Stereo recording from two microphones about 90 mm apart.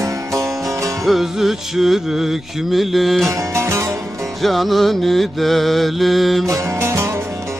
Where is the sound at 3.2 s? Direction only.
35° right (ahead or behind).